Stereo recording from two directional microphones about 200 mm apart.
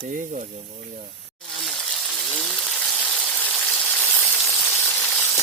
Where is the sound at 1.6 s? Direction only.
Centre (ahead or behind).